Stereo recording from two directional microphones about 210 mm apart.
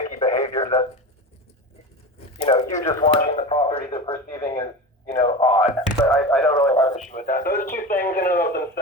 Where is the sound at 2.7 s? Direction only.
30° left (ahead or behind).